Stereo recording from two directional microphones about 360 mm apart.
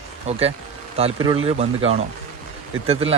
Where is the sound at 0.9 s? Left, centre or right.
Centre.